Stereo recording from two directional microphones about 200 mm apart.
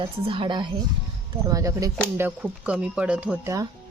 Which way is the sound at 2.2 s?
5° right (ahead or behind).